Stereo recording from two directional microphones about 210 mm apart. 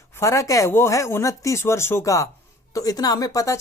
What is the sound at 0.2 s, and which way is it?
Speech, 15° left (ahead or behind).